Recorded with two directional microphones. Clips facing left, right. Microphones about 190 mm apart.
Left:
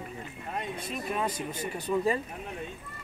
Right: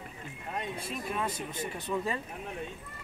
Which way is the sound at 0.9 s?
Centre (ahead or behind).